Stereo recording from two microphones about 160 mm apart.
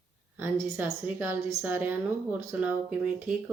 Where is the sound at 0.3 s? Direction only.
15° right (ahead or behind).